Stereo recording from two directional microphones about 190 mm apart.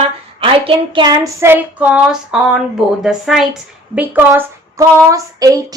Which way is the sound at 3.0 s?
Centre (ahead or behind).